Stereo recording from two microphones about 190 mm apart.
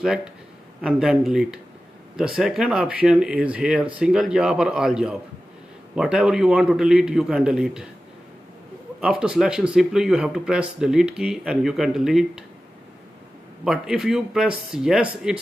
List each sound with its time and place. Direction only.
0.0 s speech: 5° right (ahead or behind)
9.0 s speech: 5° right (ahead or behind)
13.7 s speech: centre (ahead or behind)